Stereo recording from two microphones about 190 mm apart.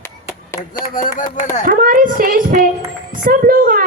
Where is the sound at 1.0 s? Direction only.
40° left (ahead or behind).